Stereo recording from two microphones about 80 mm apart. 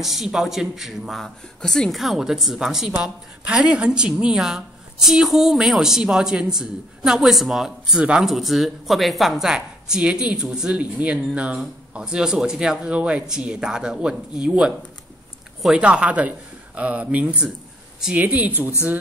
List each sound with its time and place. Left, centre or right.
0.0 s speech: centre
15.7 s speech: centre